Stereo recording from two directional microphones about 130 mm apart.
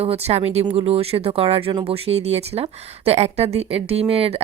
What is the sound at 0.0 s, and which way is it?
Speech, 50° right (ahead or behind).